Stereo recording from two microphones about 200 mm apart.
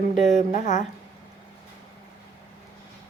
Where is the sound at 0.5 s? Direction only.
35° left (ahead or behind).